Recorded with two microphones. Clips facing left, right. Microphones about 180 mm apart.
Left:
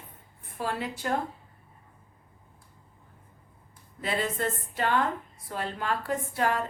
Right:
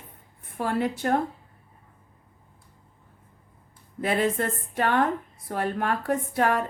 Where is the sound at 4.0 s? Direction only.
55° right (ahead or behind).